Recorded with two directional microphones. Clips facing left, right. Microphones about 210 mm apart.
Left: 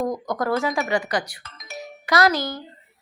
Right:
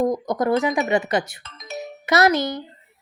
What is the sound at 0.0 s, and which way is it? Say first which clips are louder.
A woman's voice: right 4 dB; 20° right (ahead or behind).